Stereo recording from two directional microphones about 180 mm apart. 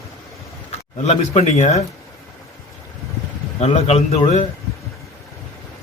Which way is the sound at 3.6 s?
35° left (ahead or behind).